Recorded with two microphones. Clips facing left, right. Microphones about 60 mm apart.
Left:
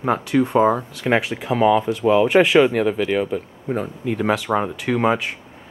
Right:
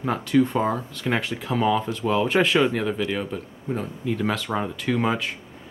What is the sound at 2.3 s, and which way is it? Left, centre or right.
Speech, centre.